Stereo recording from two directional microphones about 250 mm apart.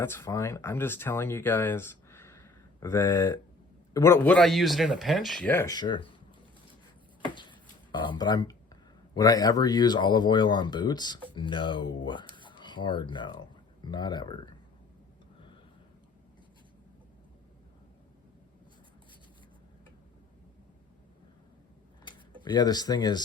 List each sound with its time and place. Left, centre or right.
0.0 s speech: centre
8.0 s speech: centre
22.4 s speech: centre